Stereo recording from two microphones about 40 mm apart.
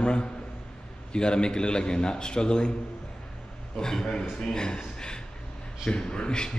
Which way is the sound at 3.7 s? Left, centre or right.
Centre.